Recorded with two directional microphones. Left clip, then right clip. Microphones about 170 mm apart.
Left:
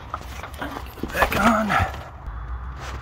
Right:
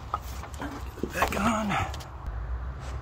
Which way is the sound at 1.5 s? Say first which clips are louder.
Left 8 dB; 25° left (ahead or behind).